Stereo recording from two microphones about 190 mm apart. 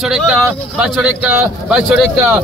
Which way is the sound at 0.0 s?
Centre (ahead or behind).